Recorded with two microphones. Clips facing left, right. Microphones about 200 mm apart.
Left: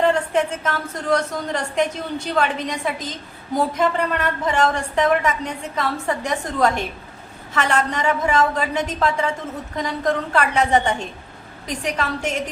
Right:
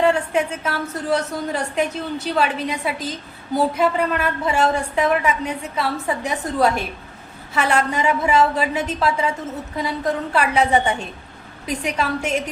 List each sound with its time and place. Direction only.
0.0 s a woman's voice: 10° right (ahead or behind)